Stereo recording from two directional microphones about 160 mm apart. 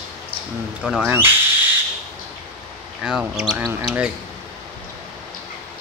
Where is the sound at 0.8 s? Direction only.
5° right (ahead or behind).